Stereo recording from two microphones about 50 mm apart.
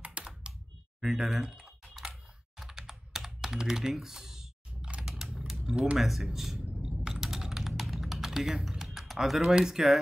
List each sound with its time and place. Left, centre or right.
0.0 s computer keyboard: right
1.0 s speech: centre
1.4 s speech: centre
2.6 s computer keyboard: centre
5.0 s typing: centre
5.9 s speech: centre
6.2 s chewing: centre
7.2 s typing: centre
9.4 s speech: centre